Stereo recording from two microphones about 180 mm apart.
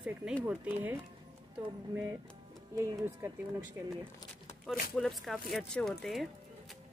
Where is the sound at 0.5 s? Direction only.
10° right (ahead or behind).